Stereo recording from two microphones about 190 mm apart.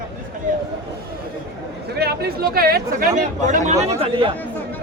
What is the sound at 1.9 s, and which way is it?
Speech, 55° right (ahead or behind).